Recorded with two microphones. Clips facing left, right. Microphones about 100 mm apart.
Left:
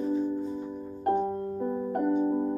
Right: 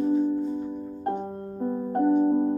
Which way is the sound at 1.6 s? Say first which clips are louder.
Right 6 dB; 35° right (ahead or behind).